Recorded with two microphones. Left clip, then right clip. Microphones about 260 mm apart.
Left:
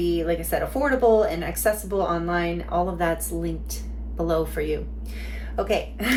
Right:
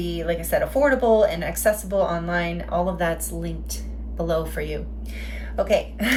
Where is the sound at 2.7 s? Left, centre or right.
Centre.